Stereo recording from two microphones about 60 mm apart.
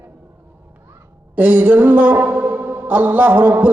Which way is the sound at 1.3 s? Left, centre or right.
Right.